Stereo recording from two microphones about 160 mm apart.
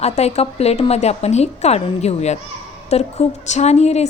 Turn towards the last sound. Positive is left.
turn(degrees=45)  # may be behind; listen again after turning